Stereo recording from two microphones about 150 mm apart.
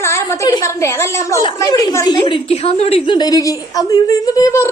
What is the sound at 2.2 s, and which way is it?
A woman's voice, 40° left (ahead or behind).